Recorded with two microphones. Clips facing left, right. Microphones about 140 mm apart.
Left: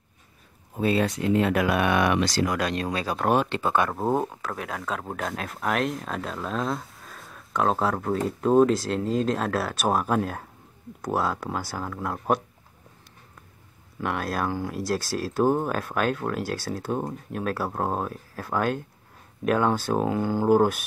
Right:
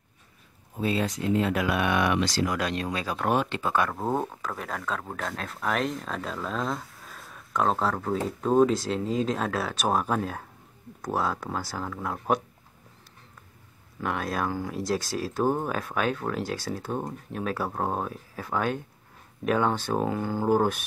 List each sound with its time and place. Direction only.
0.7 s speech: 60° left (ahead or behind); by 4.2 s 20° left (ahead or behind)
4.2 s speech: 5° left (ahead or behind)
5.0 s speech: 20° left (ahead or behind)
5.3 s speech: 10° left (ahead or behind)
14.0 s speech: 5° left (ahead or behind)